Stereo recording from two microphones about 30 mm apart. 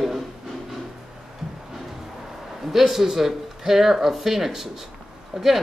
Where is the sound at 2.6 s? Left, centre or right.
Centre.